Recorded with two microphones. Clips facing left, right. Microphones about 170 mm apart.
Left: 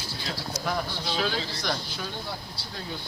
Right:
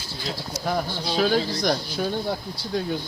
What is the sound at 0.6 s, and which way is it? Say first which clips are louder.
Speech: right 5 dB; 40° right (ahead or behind).